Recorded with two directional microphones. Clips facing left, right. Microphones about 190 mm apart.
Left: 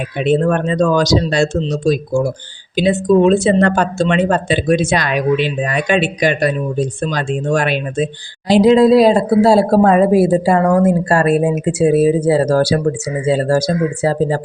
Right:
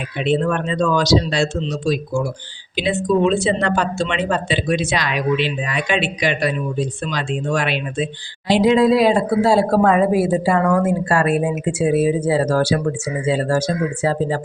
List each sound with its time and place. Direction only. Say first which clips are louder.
0.2 s a man's voice: left 4 dB; 45° left (ahead or behind)